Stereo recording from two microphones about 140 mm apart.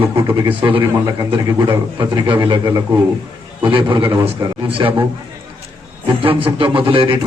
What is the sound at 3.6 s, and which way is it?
A man's voice, 35° right (ahead or behind).